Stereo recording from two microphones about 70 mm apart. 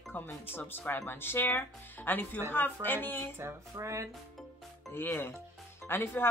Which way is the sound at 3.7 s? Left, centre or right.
Right.